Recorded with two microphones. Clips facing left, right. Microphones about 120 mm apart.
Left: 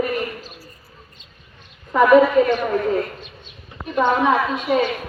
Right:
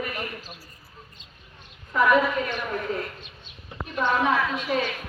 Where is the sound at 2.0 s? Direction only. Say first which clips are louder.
Left 9 dB; 40° left (ahead or behind).